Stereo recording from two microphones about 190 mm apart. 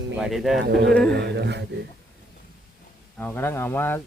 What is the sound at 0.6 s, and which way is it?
Speech, 60° right (ahead or behind).